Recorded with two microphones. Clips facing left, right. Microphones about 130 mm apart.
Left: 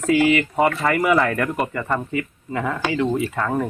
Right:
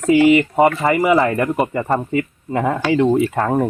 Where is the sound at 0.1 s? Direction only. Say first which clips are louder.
Right 5 dB; 20° right (ahead or behind); by 3.5 s 45° right (ahead or behind).